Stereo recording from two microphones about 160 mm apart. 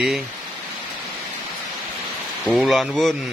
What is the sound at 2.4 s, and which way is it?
Speech, centre (ahead or behind).